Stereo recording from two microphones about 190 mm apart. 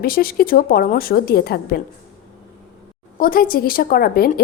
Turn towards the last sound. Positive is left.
turn(degrees=50)  # may be behind; listen again after turning